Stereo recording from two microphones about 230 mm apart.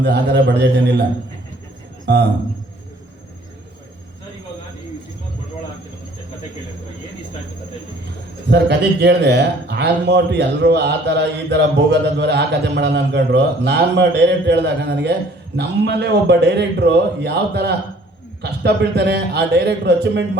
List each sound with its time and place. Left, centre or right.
0.0 s a man's voice: right
2.1 s a man's voice: right
8.4 s a man's voice: right